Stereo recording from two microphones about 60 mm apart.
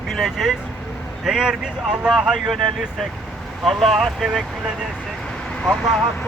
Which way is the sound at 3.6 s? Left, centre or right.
Centre.